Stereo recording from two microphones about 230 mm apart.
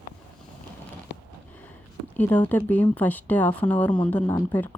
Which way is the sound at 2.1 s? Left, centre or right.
Centre.